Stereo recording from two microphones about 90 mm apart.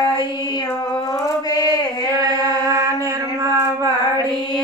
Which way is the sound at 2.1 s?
40° right (ahead or behind).